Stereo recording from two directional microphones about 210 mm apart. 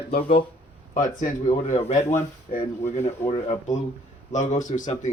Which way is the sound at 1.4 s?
30° left (ahead or behind).